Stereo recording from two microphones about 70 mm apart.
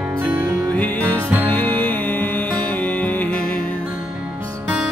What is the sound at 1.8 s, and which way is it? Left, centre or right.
Music, left.